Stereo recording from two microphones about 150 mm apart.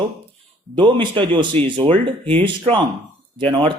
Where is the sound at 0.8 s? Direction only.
35° right (ahead or behind).